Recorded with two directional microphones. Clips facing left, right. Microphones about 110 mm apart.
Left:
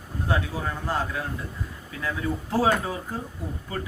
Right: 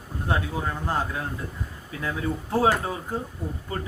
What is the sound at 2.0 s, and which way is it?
Speech, 20° right (ahead or behind).